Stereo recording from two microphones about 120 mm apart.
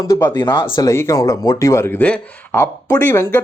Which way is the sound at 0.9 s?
25° left (ahead or behind).